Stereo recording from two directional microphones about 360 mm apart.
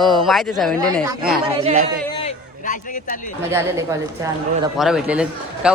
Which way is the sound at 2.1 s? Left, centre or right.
Centre.